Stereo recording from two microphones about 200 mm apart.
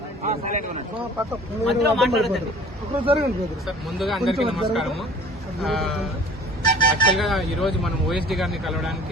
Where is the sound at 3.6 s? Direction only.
Centre (ahead or behind).